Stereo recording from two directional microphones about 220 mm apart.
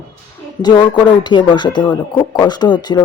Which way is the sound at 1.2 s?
20° left (ahead or behind).